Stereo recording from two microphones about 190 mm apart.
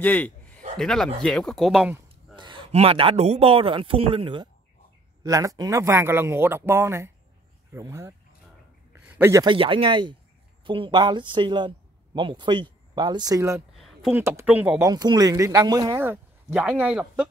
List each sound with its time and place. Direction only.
0.0 s a man's voice: 10° left (ahead or behind)
2.3 s a man's voice: 25° right (ahead or behind)
9.1 s a man's voice: 15° right (ahead or behind)
13.7 s a sound: centre (ahead or behind)
14.1 s speech: 10° right (ahead or behind)
14.9 s speech: 20° right (ahead or behind)